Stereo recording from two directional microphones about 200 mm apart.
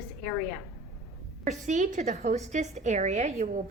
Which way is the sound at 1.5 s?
35° right (ahead or behind).